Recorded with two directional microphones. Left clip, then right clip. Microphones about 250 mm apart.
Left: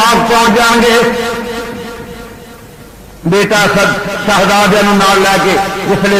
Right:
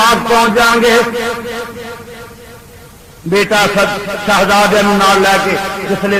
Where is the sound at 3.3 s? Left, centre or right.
Right.